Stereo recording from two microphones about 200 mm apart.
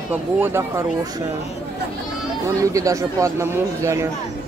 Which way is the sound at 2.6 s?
15° right (ahead or behind).